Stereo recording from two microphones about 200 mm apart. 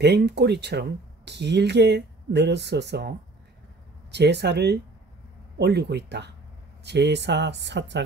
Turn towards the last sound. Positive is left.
turn(degrees=-60)  # may be behind; listen again after turning